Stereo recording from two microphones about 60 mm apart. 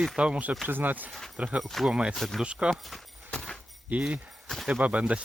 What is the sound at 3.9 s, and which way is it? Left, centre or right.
Speech, right.